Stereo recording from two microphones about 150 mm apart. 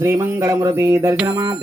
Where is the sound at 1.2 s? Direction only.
25° right (ahead or behind).